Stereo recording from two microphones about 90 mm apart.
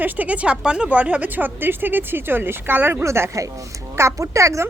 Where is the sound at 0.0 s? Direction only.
20° right (ahead or behind).